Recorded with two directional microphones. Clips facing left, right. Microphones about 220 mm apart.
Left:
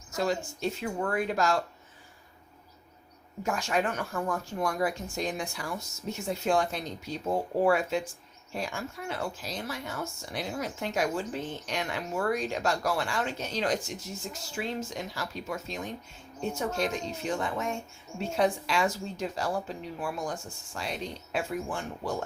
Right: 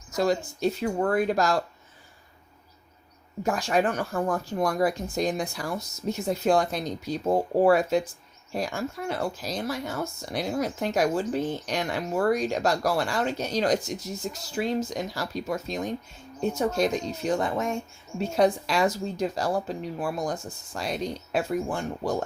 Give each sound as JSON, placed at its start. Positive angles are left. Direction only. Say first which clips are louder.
{"t": 0.2, "sound": "speech", "louder": "right 5 dB", "side_deg": -40}
{"t": 3.4, "sound": "speech", "louder": "right 5 dB", "side_deg": -35}